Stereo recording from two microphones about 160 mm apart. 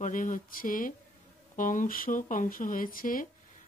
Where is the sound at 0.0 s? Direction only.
55° left (ahead or behind).